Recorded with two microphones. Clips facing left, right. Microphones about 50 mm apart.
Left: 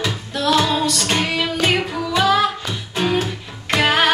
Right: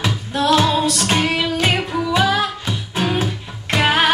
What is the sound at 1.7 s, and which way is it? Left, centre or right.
Music, centre.